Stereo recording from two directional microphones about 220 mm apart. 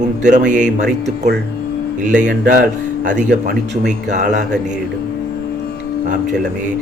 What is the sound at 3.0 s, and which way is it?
Speech, 35° right (ahead or behind).